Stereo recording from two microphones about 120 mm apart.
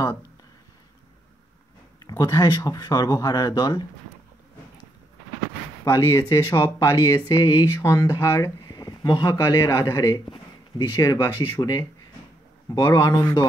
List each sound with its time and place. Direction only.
2.0 s speech: 30° left (ahead or behind)
5.9 s speech: 25° left (ahead or behind)
12.7 s speech: 35° left (ahead or behind)